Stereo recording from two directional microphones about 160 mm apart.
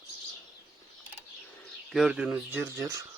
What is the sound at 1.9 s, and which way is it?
Speech, 5° right (ahead or behind).